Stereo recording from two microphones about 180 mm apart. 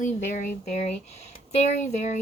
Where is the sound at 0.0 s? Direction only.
45° left (ahead or behind).